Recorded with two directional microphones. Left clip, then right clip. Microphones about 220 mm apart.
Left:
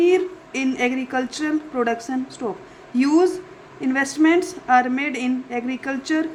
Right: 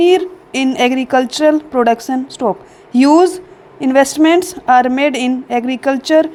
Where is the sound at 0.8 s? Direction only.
35° right (ahead or behind).